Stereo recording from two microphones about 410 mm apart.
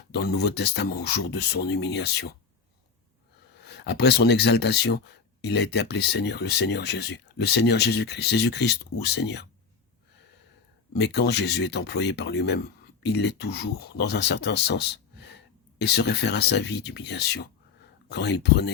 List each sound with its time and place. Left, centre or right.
0.1 s speech: left
3.6 s speech: left
10.9 s speech: left